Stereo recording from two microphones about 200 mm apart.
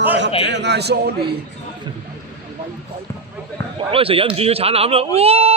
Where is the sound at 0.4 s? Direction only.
60° right (ahead or behind).